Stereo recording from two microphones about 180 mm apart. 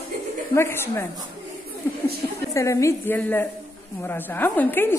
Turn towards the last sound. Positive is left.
turn(degrees=10)  # may be behind; listen again after turning